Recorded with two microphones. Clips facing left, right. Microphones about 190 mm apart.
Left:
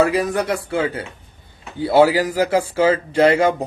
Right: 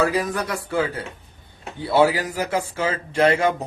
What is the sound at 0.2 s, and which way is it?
Speech, 25° left (ahead or behind).